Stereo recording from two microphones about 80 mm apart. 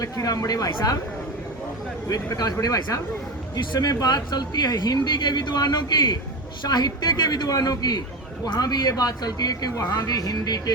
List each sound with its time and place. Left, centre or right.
0.0 s speech: left
2.0 s speech: left